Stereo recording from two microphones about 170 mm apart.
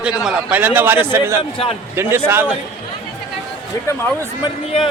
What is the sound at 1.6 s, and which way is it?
Speech, 35° left (ahead or behind).